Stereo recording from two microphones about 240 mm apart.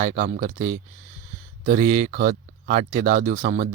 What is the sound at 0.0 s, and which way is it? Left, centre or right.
Speech, right.